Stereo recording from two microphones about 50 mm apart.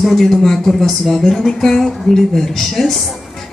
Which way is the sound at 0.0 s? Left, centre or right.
Centre.